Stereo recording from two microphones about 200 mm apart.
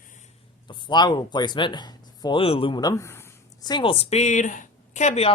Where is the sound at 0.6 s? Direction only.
25° left (ahead or behind).